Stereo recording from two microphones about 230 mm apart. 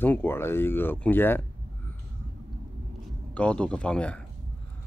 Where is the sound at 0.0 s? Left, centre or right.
Centre.